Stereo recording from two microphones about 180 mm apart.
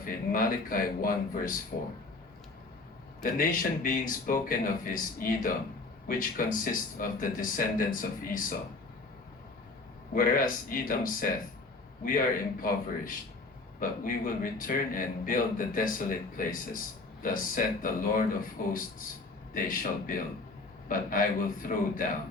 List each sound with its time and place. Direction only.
0.0 s speech: 50° left (ahead or behind)
3.3 s speech: 50° left (ahead or behind)
10.2 s speech: 50° left (ahead or behind)
19.5 s speech: 50° left (ahead or behind)